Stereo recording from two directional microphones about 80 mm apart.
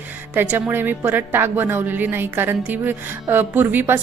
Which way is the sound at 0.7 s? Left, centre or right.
Right.